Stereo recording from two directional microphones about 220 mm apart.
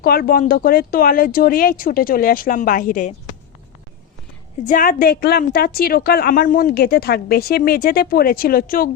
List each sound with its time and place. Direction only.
0.0 s speech: 40° left (ahead or behind)
4.6 s a woman's voice: 35° left (ahead or behind)